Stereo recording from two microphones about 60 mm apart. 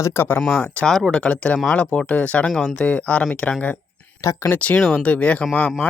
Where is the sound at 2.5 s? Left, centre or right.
Centre.